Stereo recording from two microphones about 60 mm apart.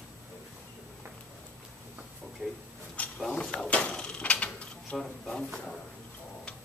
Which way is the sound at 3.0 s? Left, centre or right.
Left.